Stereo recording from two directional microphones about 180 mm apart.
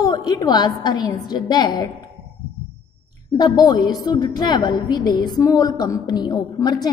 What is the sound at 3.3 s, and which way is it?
A woman's voice, 20° left (ahead or behind).